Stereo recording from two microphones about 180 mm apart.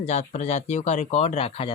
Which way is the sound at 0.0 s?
35° left (ahead or behind).